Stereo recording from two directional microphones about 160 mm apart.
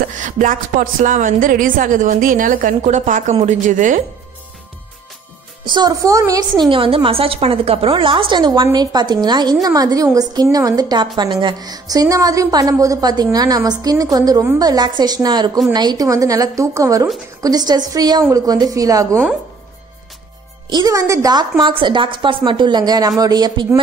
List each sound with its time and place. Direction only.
0.0 s a woman's voice: 55° right (ahead or behind)
5.7 s a woman's voice: 25° right (ahead or behind)
20.7 s a woman's voice: 20° right (ahead or behind)